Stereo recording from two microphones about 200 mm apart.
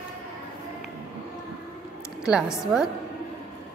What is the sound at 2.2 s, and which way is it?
Speech, 5° right (ahead or behind).